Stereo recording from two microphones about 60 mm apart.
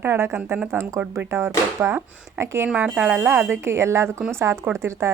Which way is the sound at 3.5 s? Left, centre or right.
Right.